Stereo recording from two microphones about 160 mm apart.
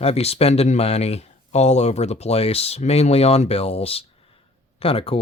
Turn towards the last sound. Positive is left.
turn(degrees=35)  # may be behind; listen again after turning